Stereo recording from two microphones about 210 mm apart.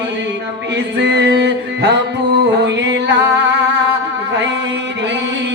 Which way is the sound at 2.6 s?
55° right (ahead or behind).